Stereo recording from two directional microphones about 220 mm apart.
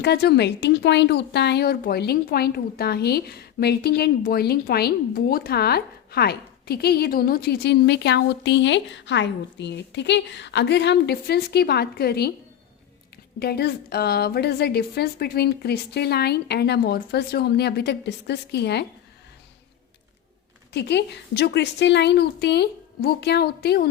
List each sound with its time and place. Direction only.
0.0 s speech: 50° left (ahead or behind)
13.4 s speech: 45° left (ahead or behind)
20.7 s speech: 50° left (ahead or behind)